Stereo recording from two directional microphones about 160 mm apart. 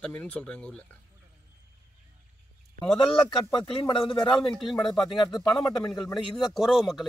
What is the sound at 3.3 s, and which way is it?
Speech, 30° left (ahead or behind).